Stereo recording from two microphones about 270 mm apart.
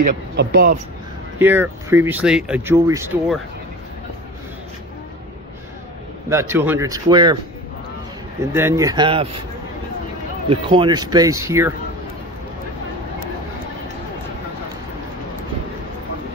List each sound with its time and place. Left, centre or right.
0.4 s speech: right
1.4 s speech: centre
6.2 s speech: centre
8.4 s speech: centre
10.5 s speech: centre